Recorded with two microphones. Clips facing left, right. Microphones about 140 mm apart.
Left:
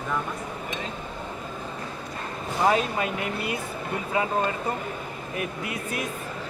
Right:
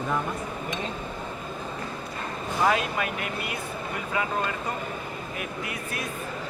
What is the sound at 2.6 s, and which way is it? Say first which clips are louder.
Speech: left 2 dB; 30° left (ahead or behind).